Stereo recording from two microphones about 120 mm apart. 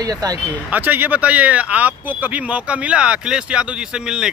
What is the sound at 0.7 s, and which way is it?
Speech, 15° right (ahead or behind).